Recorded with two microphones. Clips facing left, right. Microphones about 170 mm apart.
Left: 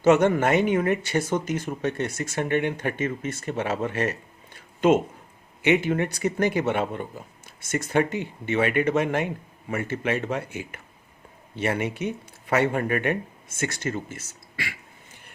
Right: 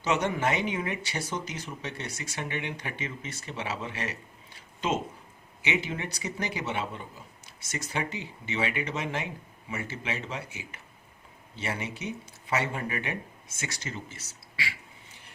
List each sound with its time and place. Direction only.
0.0 s speech: 50° left (ahead or behind)